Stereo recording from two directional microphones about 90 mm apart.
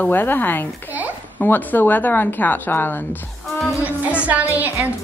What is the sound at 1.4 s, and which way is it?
A woman's voice, 20° left (ahead or behind).